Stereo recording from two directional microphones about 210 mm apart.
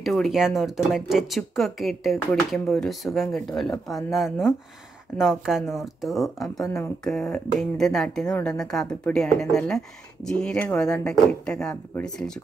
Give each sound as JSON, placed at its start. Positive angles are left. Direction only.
{"t": 0.0, "sound": "a woman's voice", "side_deg": 0}
{"t": 6.6, "sound": "a woman's voice", "side_deg": 15}